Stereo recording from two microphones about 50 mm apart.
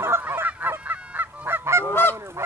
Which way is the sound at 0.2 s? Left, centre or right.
Right.